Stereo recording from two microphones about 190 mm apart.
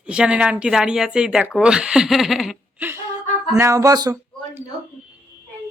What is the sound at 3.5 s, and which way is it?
Speech, 15° right (ahead or behind).